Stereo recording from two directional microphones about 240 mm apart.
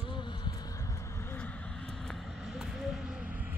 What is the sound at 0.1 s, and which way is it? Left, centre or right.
Vehicle, centre.